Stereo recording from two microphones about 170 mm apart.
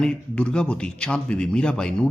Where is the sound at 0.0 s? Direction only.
5° left (ahead or behind).